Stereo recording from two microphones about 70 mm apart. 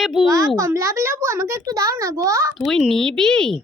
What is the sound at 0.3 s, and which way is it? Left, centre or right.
A child's voice, right.